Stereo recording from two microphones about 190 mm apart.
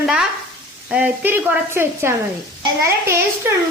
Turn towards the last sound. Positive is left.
turn(degrees=-15)  # may be behind; listen again after turning